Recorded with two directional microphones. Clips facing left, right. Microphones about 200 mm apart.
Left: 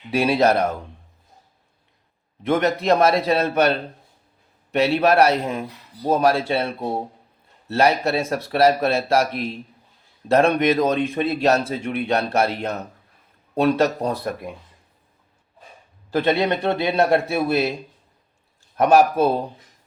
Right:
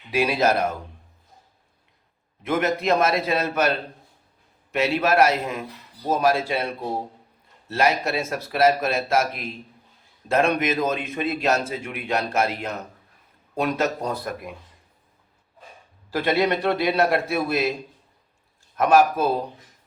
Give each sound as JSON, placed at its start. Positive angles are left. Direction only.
{"t": 0.1, "sound": "a man's voice", "side_deg": 30}
{"t": 2.5, "sound": "a man's voice", "side_deg": 30}
{"t": 4.8, "sound": "a man's voice", "side_deg": 30}
{"t": 7.7, "sound": "a man's voice", "side_deg": 30}
{"t": 16.1, "sound": "a man's voice", "side_deg": 25}
{"t": 18.8, "sound": "a man's voice", "side_deg": 30}